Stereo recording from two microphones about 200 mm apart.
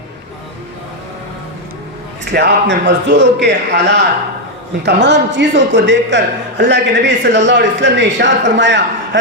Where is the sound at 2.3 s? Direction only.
55° right (ahead or behind).